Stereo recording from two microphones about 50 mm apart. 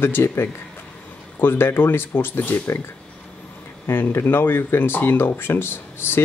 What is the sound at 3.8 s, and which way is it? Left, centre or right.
Speech, left.